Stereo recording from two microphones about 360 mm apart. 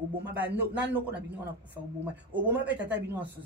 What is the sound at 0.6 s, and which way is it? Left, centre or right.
Speech, centre.